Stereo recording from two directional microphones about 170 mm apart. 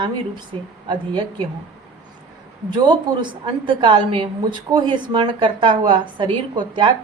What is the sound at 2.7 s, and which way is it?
A woman's voice, 25° right (ahead or behind).